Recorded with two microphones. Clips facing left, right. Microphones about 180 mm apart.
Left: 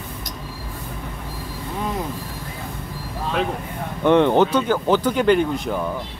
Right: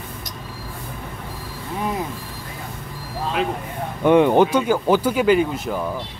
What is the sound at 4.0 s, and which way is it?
Speech, 10° right (ahead or behind).